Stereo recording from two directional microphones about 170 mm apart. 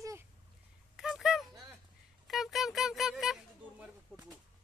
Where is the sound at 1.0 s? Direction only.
Centre (ahead or behind).